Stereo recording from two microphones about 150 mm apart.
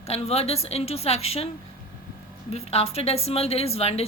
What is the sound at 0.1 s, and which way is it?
A woman's voice, 45° left (ahead or behind).